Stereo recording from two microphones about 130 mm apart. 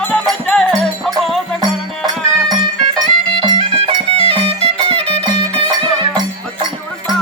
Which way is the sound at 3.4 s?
40° right (ahead or behind).